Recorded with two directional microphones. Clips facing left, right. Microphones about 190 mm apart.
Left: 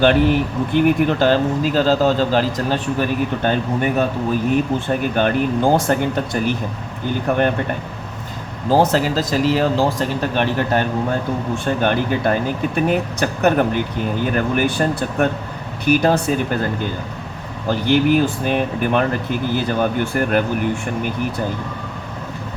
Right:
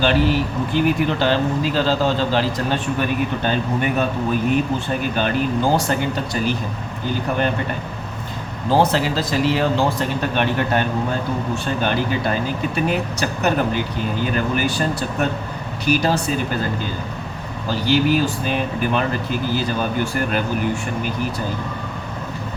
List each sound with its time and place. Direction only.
0.0 s speech: 55° left (ahead or behind)
4.9 s speech: 55° left (ahead or behind)
8.7 s speech: 45° left (ahead or behind)